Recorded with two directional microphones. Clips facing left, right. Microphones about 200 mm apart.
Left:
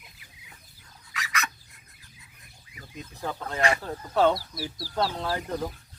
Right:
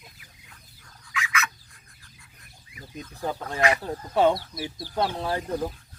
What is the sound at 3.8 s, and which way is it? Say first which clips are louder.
Speech: right 1 dB; 10° right (ahead or behind).